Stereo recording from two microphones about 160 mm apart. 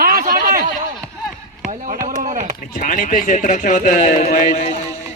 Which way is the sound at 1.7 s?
55° right (ahead or behind).